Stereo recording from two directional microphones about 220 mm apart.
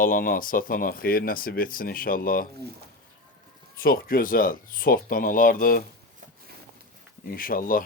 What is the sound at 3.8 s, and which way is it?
Speech, 40° left (ahead or behind).